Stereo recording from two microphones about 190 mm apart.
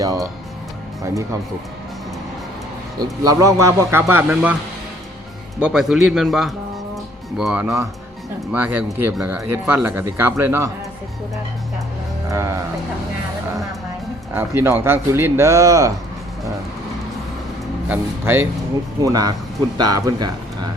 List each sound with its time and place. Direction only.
0.0 s speech: 20° right (ahead or behind)
3.0 s speech: 20° right (ahead or behind)
5.5 s speech: 5° right (ahead or behind)
6.9 s music: centre (ahead or behind)
8.5 s speech: 10° right (ahead or behind)
12.3 s speech: 15° right (ahead or behind)
14.3 s speech: 10° right (ahead or behind)
17.8 s speech: 10° right (ahead or behind)
19.0 s speech: 20° right (ahead or behind)